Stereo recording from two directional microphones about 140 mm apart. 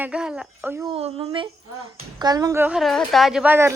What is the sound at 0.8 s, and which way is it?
Speech, 40° right (ahead or behind).